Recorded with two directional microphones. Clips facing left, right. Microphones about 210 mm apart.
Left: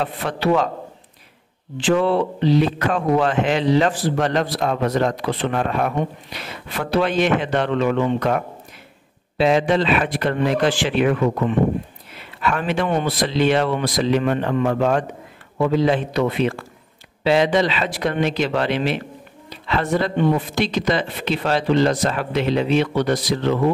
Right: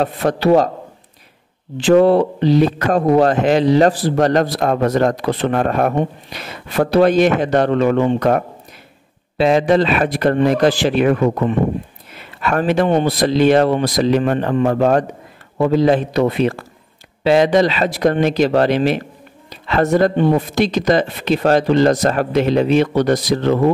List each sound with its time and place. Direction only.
0.0 s speech: 40° right (ahead or behind)
1.8 s speech: 40° right (ahead or behind)